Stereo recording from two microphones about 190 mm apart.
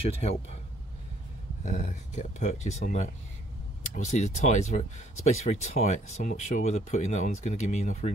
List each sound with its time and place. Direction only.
1.6 s speech: 40° left (ahead or behind)